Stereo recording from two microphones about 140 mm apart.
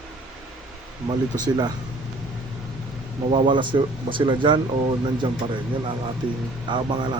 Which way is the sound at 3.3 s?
35° right (ahead or behind).